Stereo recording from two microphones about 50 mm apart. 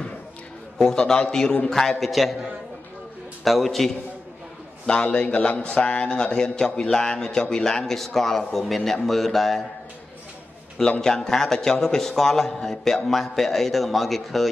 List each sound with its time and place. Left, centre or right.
0.7 s a man's voice: centre
4.8 s a man's voice: centre
10.8 s a man's voice: centre